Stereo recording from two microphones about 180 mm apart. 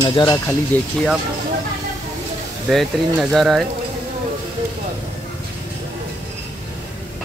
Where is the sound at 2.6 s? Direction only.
Centre (ahead or behind).